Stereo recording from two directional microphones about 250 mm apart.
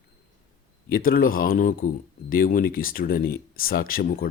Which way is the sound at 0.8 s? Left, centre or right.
Left.